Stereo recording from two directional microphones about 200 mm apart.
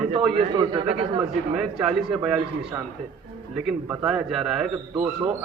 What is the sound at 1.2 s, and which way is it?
Speech, 5° right (ahead or behind).